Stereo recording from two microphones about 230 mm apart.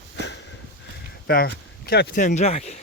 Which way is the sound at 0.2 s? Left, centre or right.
Left.